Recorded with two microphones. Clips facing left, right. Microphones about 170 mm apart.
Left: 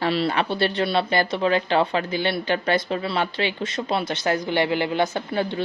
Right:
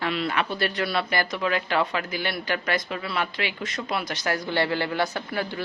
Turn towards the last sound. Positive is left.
turn(degrees=25)  # may be behind; listen again after turning